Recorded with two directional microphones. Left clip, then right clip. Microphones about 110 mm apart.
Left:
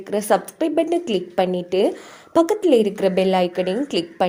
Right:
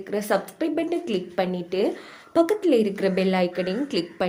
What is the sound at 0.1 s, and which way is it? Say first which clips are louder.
A woman's voice: left 5 dB; 50° left (ahead or behind).